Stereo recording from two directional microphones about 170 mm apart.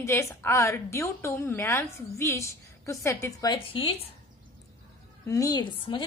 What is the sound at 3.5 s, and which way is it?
Speech, 30° left (ahead or behind).